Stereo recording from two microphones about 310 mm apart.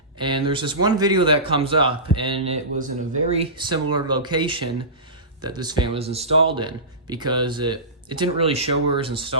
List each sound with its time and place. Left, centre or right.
0.2 s speech: centre